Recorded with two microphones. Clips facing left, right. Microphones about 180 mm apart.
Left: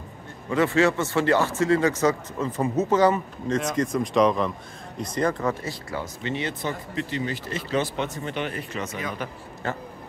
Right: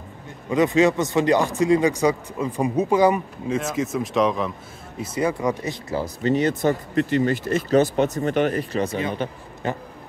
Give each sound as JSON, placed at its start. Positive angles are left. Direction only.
{"t": 0.5, "sound": "speech", "side_deg": -15}
{"t": 5.9, "sound": "speech", "side_deg": -40}